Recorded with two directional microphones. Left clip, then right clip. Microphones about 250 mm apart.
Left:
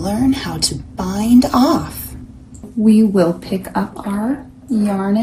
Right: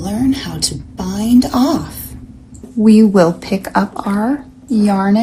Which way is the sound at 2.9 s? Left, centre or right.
Right.